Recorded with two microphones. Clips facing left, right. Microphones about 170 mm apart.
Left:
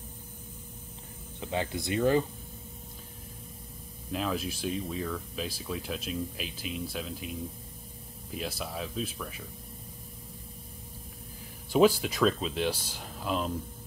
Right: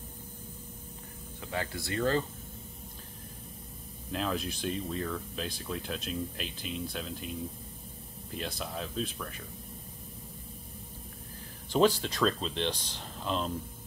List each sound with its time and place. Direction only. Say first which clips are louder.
1.4 s speech: left 4 dB; 20° left (ahead or behind)
4.1 s speech: left 1 dB; centre (ahead or behind)
11.7 s speech: left 3 dB; 10° left (ahead or behind)